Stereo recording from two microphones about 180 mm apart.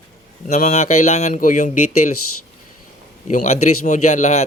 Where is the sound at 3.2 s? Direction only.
40° left (ahead or behind).